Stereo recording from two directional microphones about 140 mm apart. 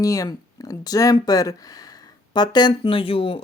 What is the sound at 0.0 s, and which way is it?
Speech, 25° left (ahead or behind).